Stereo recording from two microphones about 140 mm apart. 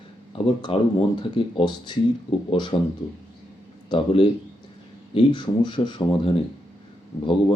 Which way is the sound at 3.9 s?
35° left (ahead or behind).